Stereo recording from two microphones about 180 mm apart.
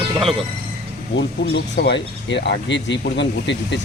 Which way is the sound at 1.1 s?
70° left (ahead or behind).